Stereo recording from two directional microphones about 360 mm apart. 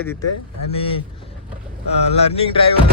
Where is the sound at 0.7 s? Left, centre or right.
Centre.